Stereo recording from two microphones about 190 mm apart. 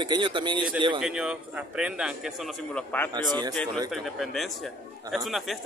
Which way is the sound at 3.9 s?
Centre (ahead or behind).